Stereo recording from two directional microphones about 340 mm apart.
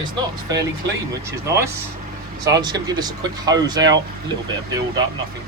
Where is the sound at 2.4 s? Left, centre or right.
Centre.